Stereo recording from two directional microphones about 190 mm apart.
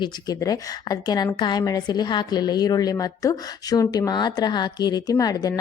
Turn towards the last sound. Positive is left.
turn(degrees=20)  # may be behind; listen again after turning